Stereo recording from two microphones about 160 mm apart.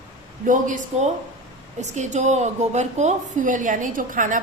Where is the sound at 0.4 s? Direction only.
50° right (ahead or behind).